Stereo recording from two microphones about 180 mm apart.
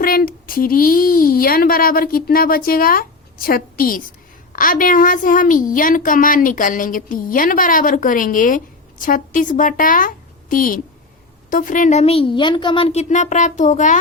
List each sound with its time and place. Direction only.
0.0 s a woman's voice: 55° left (ahead or behind)